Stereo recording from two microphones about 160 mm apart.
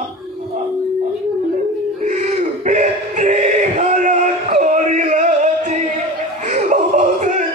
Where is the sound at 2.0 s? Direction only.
50° right (ahead or behind).